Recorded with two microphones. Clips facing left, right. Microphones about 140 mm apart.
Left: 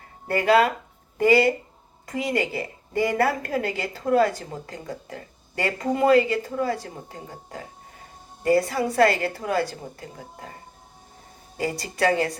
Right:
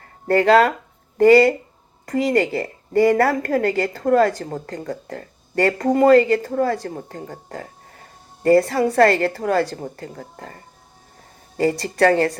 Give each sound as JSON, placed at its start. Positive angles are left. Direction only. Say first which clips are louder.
{"t": 0.3, "sound": "a woman's voice", "louder": "right 5 dB", "side_deg": -45}